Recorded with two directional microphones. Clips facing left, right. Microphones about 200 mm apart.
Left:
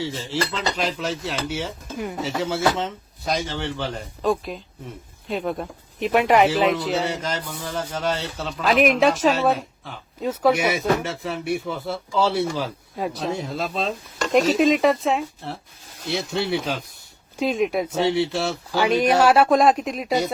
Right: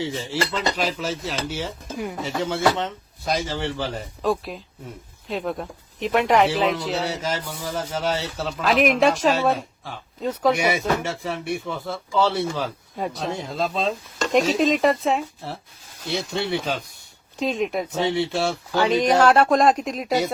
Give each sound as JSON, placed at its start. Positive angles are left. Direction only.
{"t": 0.0, "sound": "speech", "side_deg": -15}
{"t": 0.4, "sound": "speech", "side_deg": 0}